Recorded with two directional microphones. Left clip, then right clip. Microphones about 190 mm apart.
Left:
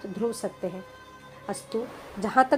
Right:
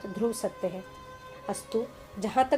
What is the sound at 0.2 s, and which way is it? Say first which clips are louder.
Speech: even; 15° left (ahead or behind).